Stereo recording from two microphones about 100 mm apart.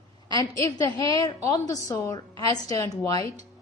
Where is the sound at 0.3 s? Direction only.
35° left (ahead or behind).